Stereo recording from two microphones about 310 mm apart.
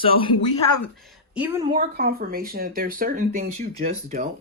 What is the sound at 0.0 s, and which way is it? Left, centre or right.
Speech, centre.